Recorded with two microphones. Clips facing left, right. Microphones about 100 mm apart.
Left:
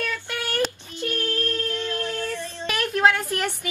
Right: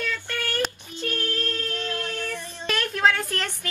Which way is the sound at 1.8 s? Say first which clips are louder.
Left 2 dB; 20° left (ahead or behind).